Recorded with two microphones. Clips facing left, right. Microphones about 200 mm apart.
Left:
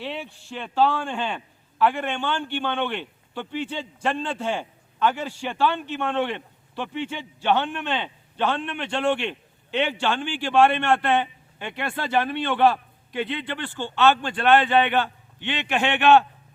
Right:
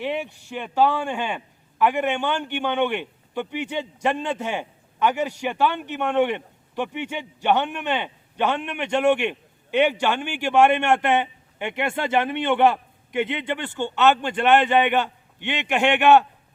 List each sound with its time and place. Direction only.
0.0 s a man's voice: 15° right (ahead or behind)